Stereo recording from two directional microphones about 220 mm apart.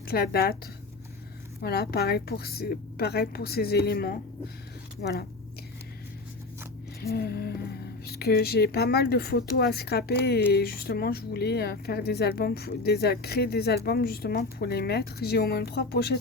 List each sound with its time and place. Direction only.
0.1 s speech: 45° left (ahead or behind)
1.6 s speech: 45° left (ahead or behind)
7.0 s speech: 45° left (ahead or behind)